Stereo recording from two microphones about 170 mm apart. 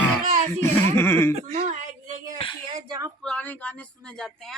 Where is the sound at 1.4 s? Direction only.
40° right (ahead or behind).